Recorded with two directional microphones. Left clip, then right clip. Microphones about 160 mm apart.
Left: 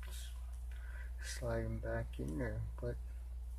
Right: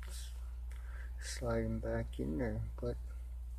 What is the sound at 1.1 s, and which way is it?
Speech, 25° right (ahead or behind).